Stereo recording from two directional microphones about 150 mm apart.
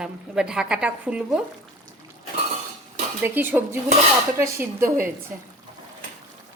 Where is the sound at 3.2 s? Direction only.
15° right (ahead or behind).